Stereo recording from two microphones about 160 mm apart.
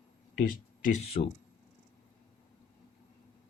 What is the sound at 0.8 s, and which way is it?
Speech, 45° left (ahead or behind).